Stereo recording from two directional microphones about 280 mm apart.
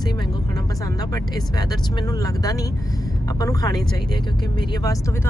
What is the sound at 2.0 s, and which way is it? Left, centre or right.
Speech, centre.